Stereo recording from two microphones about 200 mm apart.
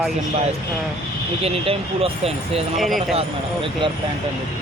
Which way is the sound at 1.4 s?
30° right (ahead or behind).